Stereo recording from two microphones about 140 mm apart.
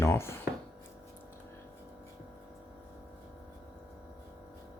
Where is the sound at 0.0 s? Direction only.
20° left (ahead or behind).